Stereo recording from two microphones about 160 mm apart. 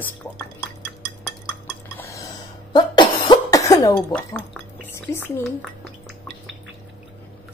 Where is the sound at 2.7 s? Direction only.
30° left (ahead or behind).